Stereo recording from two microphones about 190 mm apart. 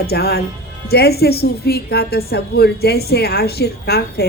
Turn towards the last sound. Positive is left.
turn(degrees=55)  # may be behind; listen again after turning